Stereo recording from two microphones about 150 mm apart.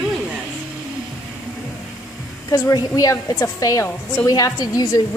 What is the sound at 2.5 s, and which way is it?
A woman's voice, 25° left (ahead or behind).